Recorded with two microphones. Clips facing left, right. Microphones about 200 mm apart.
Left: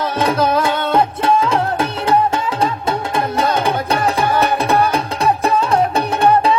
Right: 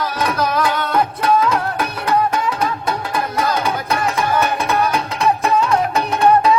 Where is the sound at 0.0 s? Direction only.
25° left (ahead or behind).